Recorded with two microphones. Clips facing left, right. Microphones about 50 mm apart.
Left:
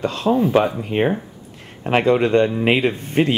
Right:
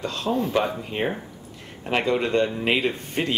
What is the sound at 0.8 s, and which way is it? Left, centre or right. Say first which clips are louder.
Speech: left 7 dB; left.